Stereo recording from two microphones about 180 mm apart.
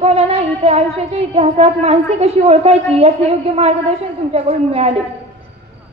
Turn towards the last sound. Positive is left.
turn(degrees=-35)  # may be behind; listen again after turning